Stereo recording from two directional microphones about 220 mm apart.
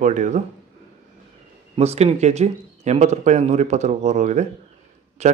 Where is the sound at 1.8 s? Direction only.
30° right (ahead or behind).